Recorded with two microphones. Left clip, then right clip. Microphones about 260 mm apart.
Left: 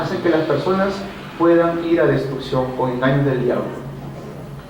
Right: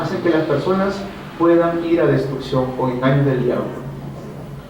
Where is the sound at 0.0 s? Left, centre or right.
Centre.